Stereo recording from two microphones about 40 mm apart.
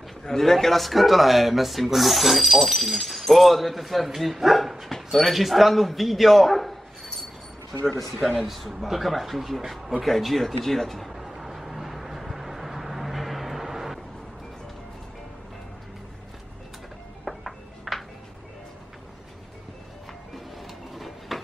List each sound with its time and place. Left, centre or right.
0.2 s a man's voice: centre
11.1 s vehicle: centre
17.2 s music: centre
20.9 s a sound: centre